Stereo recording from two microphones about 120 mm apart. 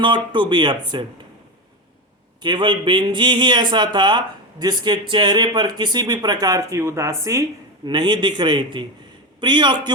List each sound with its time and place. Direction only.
0.3 s speech: 40° right (ahead or behind)
2.4 s speech: 40° right (ahead or behind)
7.9 s speech: 40° right (ahead or behind)